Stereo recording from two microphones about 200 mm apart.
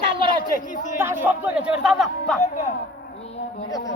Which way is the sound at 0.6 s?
40° left (ahead or behind).